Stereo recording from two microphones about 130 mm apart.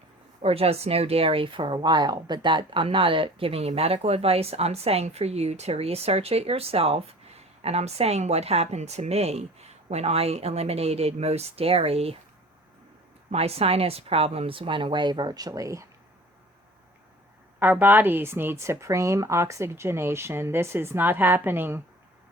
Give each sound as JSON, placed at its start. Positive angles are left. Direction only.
{"t": 0.4, "sound": "speech", "side_deg": -50}
{"t": 13.3, "sound": "speech", "side_deg": -50}
{"t": 17.6, "sound": "speech", "side_deg": -15}